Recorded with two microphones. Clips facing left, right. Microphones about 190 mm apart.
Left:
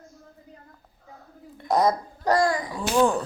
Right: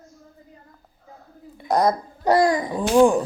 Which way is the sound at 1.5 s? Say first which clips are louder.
Right 2 dB; centre (ahead or behind).